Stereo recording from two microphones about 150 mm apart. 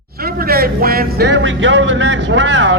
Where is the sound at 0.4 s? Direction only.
90° right.